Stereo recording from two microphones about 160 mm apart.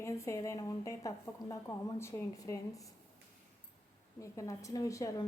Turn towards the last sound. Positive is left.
turn(degrees=20)  # may be behind; listen again after turning